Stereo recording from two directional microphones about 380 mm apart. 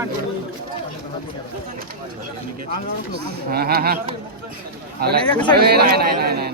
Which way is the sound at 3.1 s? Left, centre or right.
Right.